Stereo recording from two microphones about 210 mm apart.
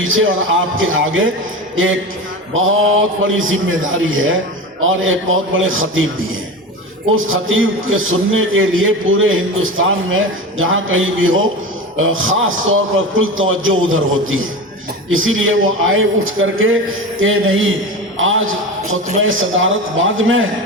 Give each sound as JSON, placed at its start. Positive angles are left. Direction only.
{"t": 0.0, "sound": "a man's voice", "side_deg": -70}
{"t": 7.3, "sound": "a man's voice", "side_deg": -70}